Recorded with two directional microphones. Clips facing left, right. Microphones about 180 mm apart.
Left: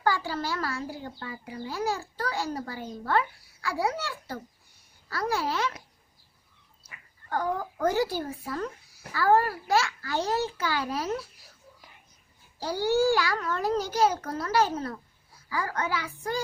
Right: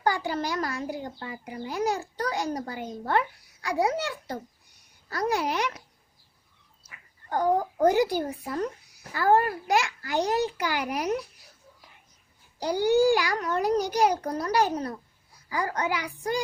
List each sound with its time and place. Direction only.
0.0 s a child's voice: 20° right (ahead or behind)
7.8 s a child's voice: 15° right (ahead or behind)
12.5 s a child's voice: 15° right (ahead or behind)